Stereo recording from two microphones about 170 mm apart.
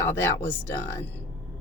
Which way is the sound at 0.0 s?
15° left (ahead or behind).